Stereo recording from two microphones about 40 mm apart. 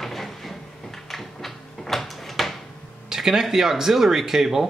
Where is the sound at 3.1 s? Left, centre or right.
Centre.